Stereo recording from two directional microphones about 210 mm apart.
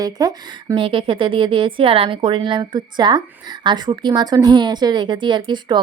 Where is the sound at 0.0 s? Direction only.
20° right (ahead or behind).